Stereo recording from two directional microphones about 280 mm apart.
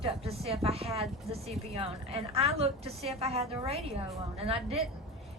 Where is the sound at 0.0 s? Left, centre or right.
Right.